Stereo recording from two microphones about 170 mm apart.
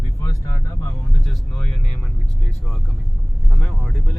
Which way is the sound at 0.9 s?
Centre (ahead or behind).